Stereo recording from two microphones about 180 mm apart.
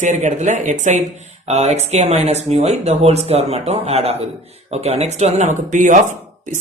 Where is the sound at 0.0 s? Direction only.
45° right (ahead or behind).